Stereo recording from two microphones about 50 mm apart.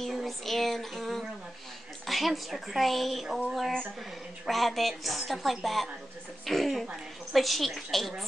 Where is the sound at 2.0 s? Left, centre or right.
Centre.